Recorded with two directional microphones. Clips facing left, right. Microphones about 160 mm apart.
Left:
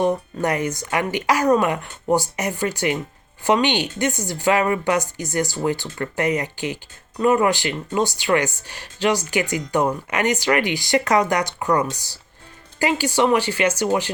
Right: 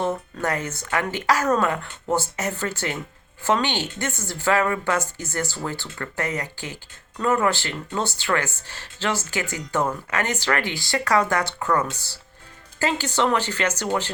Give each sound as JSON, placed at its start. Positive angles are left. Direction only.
{"t": 0.0, "sound": "speech", "side_deg": 15}